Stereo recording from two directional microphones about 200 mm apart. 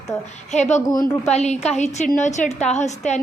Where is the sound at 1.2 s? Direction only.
35° left (ahead or behind).